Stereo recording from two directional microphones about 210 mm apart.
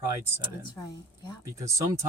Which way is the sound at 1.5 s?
15° right (ahead or behind).